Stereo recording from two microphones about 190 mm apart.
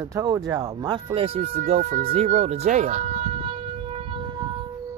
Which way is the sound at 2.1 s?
35° right (ahead or behind).